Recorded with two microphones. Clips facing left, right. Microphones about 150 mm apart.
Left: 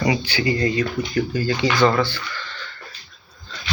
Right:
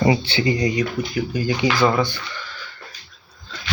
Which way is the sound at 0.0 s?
30° right (ahead or behind).